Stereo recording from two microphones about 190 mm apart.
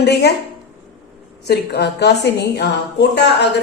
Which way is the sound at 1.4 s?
60° left (ahead or behind).